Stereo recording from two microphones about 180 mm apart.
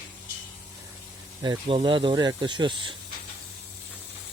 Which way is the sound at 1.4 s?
25° right (ahead or behind).